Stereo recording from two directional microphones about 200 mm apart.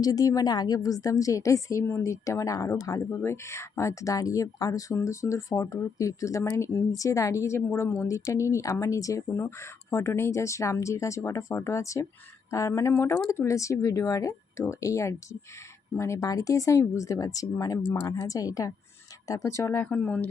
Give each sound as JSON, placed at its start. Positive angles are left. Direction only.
{"t": 0.0, "sound": "a woman's voice", "side_deg": 20}